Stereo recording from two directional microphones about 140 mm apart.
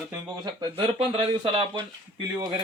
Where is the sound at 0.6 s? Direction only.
40° right (ahead or behind).